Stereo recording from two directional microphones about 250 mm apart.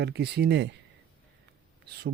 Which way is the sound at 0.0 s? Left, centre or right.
Right.